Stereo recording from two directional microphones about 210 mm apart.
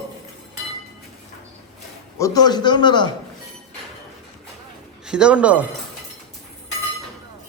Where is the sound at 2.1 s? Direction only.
15° left (ahead or behind).